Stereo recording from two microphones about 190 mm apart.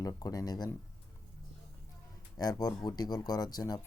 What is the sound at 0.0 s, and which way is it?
Speech, 20° left (ahead or behind).